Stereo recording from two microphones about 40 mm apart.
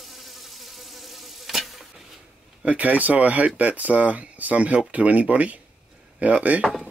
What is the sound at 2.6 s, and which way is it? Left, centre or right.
Speech, right.